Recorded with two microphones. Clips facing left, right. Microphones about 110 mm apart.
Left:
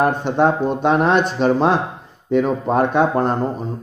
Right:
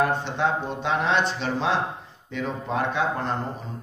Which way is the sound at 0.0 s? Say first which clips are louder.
Left 7 dB; 50° left (ahead or behind).